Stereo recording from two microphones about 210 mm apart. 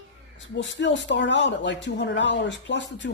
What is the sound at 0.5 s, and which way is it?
Speech, 60° left (ahead or behind).